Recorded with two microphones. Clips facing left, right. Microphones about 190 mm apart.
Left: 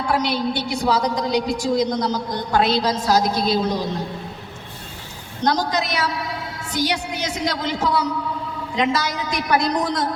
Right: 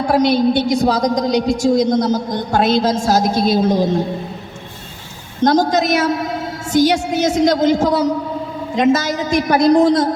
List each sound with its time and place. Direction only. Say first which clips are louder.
0.0 s a woman's voice: right 8 dB; 45° right (ahead or behind)
5.5 s a woman's voice: right 7 dB; 45° right (ahead or behind)